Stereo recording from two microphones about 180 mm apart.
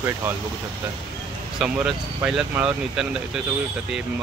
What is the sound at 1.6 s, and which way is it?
Speech, 5° right (ahead or behind).